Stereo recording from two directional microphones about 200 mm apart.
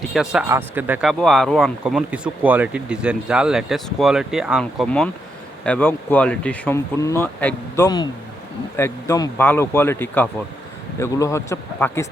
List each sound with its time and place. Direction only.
0.1 s speech: 5° right (ahead or behind); by 12.0 s 15° left (ahead or behind)